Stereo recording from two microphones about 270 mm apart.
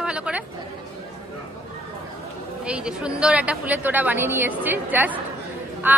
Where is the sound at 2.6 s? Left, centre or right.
Centre.